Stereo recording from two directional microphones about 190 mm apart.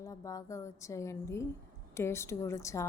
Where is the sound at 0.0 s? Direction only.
15° left (ahead or behind).